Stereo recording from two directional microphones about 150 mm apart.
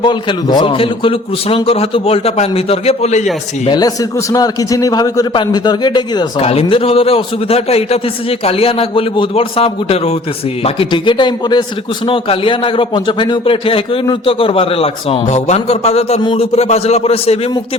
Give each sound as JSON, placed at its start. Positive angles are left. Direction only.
{"t": 0.0, "sound": "a man's voice", "side_deg": 30}
{"t": 3.7, "sound": "a man's voice", "side_deg": 25}
{"t": 6.4, "sound": "a man's voice", "side_deg": 40}
{"t": 16.2, "sound": "a man's voice", "side_deg": 30}
{"t": 16.6, "sound": "a man's voice", "side_deg": 45}